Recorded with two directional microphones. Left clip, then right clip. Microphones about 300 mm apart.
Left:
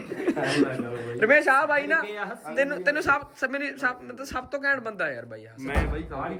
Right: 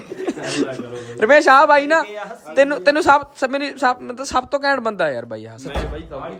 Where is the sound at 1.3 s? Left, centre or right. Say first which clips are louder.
Right 11 dB; right.